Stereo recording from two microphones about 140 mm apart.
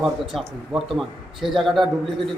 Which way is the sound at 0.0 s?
5° right (ahead or behind).